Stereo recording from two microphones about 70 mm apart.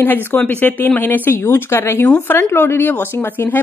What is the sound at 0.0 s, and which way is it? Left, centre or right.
Speech, left.